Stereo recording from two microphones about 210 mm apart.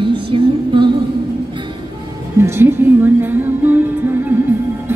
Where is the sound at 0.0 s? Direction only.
25° right (ahead or behind).